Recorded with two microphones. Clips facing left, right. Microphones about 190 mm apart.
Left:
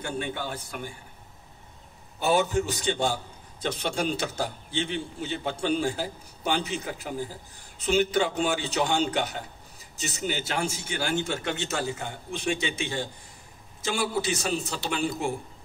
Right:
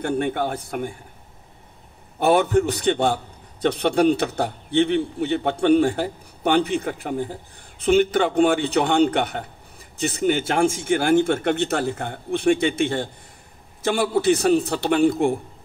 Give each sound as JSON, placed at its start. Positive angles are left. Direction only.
{"t": 0.0, "sound": "a man's voice", "side_deg": -60}
{"t": 2.1, "sound": "a man's voice", "side_deg": -60}